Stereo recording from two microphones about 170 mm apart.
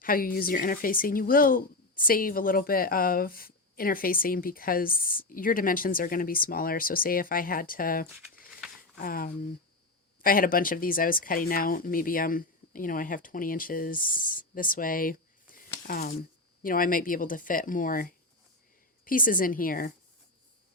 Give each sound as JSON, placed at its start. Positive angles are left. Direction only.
{"t": 0.0, "sound": "speech", "side_deg": 55}